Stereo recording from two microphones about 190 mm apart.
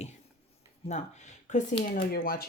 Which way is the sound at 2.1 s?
50° left (ahead or behind).